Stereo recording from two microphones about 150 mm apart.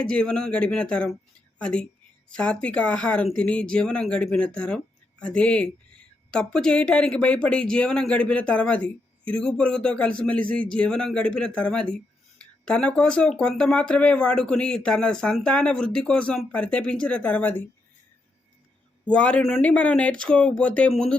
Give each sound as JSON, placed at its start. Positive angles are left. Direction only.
{"t": 0.0, "sound": "speech", "side_deg": 5}
{"t": 19.0, "sound": "speech", "side_deg": 10}